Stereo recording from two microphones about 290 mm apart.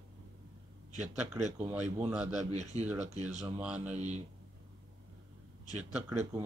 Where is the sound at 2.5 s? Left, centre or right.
Right.